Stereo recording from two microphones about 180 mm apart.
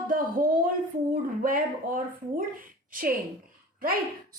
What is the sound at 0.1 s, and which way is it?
Speech, 50° right (ahead or behind).